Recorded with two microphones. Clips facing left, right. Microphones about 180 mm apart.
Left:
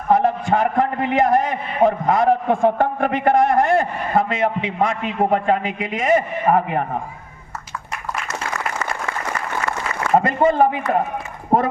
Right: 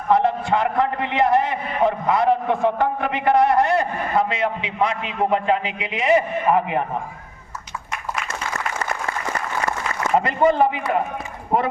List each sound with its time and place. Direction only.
0.1 s a man's voice: 40° left (ahead or behind)
10.2 s a man's voice: 45° left (ahead or behind)